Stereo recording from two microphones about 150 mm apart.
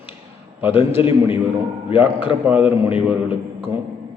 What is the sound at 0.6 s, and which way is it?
Speech, 15° right (ahead or behind).